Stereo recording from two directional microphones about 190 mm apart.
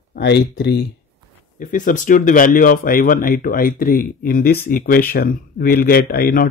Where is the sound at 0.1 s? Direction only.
60° left (ahead or behind).